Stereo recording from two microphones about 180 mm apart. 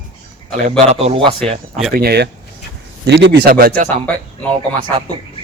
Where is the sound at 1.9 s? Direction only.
60° right (ahead or behind).